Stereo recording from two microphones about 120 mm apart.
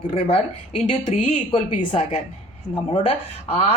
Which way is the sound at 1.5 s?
60° left (ahead or behind).